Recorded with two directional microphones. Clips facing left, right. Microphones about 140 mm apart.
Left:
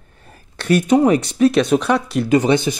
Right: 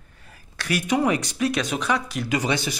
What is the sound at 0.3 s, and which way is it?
Speech, 25° left (ahead or behind).